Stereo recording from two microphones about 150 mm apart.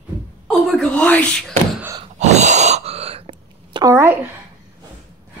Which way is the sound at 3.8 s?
20° right (ahead or behind).